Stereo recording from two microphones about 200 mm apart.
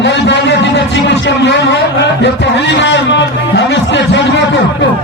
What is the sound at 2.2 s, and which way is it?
A man's voice, 65° left (ahead or behind).